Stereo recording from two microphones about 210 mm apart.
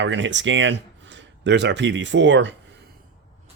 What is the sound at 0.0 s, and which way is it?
Speech, 60° right (ahead or behind).